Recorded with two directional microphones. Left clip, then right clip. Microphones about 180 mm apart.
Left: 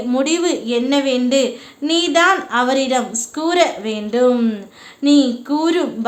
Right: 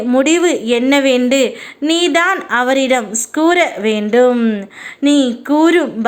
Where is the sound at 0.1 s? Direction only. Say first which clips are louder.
Right 5 dB; 25° right (ahead or behind).